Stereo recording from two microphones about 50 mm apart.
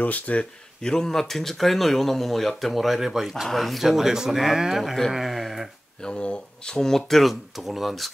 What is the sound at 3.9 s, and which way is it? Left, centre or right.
Speech, centre.